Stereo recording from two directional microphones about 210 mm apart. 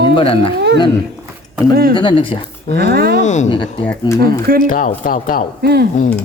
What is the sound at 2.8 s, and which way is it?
Speech, 50° right (ahead or behind).